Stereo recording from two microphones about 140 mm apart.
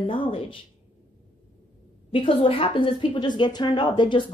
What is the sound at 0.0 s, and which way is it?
Speech, 40° left (ahead or behind).